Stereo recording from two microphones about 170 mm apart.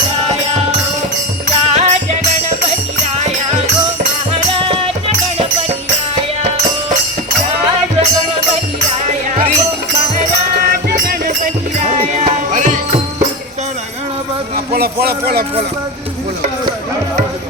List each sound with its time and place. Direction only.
1.7 s music: 40° right (ahead or behind)
9.4 s music: 40° right (ahead or behind)
10.7 s music: 60° right (ahead or behind)
11.9 s music: 45° right (ahead or behind)
14.7 s speech: 65° right (ahead or behind)